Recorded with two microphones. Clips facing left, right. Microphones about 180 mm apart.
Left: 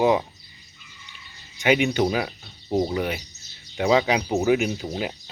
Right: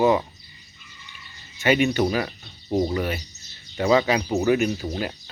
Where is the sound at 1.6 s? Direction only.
15° left (ahead or behind).